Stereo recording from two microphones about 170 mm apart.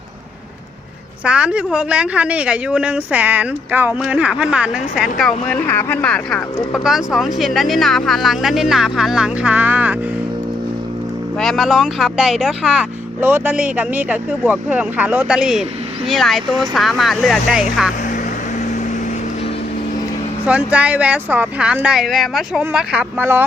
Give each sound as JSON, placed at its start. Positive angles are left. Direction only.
{"t": 1.2, "sound": "speech", "side_deg": -5}
{"t": 5.5, "sound": "speech", "side_deg": 10}
{"t": 11.3, "sound": "speech", "side_deg": 0}
{"t": 20.5, "sound": "speech", "side_deg": -10}